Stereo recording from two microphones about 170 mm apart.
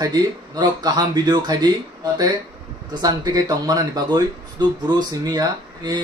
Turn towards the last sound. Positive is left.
turn(degrees=-25)  # may be behind; listen again after turning